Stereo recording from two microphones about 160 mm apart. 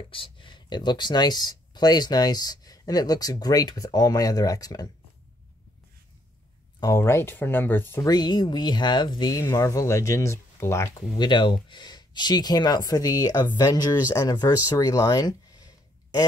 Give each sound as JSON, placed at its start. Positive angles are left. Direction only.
{"t": 0.1, "sound": "speech", "side_deg": 30}
{"t": 6.8, "sound": "speech", "side_deg": 20}
{"t": 8.1, "sound": "speech", "side_deg": 25}
{"t": 11.1, "sound": "speech", "side_deg": 30}